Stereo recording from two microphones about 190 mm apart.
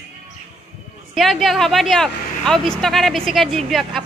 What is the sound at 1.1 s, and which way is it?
Speech, centre (ahead or behind).